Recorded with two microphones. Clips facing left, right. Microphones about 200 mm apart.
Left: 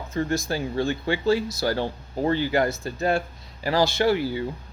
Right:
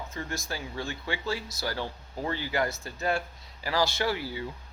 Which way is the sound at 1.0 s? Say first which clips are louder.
Left 11 dB; 25° left (ahead or behind).